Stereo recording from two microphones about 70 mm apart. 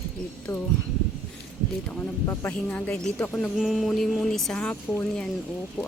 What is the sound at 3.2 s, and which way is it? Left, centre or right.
Speech, centre.